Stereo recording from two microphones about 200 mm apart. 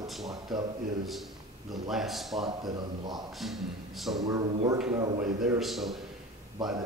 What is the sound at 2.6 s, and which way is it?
Speech, 20° right (ahead or behind).